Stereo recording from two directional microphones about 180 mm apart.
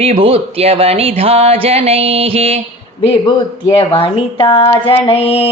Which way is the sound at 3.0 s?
30° left (ahead or behind).